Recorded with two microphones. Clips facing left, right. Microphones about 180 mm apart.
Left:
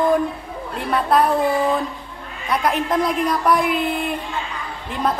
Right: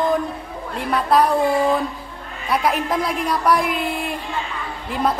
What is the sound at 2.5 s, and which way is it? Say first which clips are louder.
A woman's voice: even; centre (ahead or behind).